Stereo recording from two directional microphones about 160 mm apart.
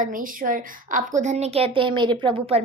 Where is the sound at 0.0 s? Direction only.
60° right (ahead or behind).